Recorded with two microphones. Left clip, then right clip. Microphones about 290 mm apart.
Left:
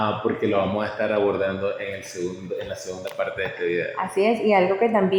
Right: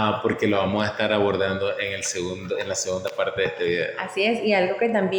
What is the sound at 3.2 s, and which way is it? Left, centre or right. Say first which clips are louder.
Speech: even; right.